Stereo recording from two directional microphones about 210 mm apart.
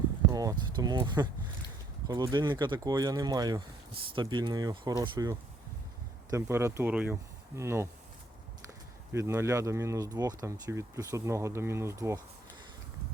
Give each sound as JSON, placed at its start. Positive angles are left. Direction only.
{"t": 0.3, "sound": "speech", "side_deg": -15}
{"t": 9.1, "sound": "speech", "side_deg": -15}